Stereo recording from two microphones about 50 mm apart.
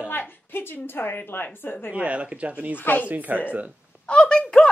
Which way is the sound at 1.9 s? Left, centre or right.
Right.